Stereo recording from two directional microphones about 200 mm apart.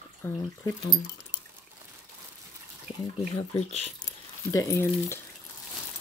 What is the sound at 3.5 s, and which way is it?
Speech, 30° left (ahead or behind).